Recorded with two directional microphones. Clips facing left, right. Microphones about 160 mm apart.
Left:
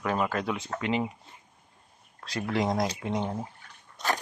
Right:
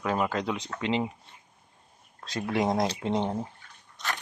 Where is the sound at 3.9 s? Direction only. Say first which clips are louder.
Left 5 dB; 40° left (ahead or behind).